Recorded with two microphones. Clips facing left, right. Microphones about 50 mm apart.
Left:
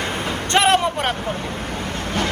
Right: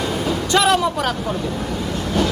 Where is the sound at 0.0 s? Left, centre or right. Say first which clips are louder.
Right 3 dB; left.